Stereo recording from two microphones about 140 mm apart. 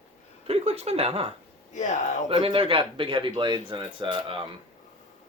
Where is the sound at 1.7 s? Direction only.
60° left (ahead or behind).